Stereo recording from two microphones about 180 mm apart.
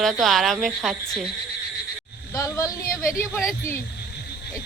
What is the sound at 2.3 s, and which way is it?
Speech, 20° left (ahead or behind).